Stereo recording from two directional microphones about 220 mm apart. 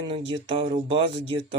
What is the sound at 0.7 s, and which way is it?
Speech, 25° right (ahead or behind).